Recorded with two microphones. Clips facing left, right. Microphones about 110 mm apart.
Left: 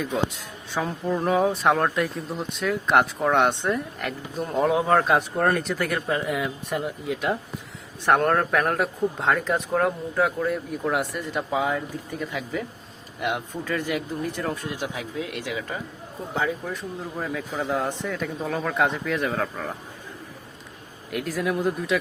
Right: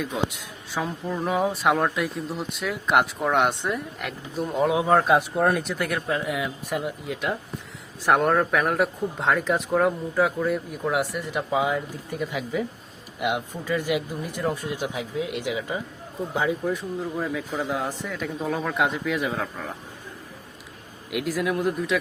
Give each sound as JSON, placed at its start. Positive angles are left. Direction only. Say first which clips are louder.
{"t": 0.7, "sound": "speech", "louder": "left 3 dB", "side_deg": -5}
{"t": 17.2, "sound": "speech", "louder": "left 2 dB", "side_deg": 0}
{"t": 21.1, "sound": "speech", "louder": "right 1 dB", "side_deg": 0}